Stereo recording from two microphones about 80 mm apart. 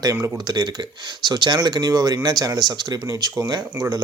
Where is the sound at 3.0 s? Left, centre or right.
Right.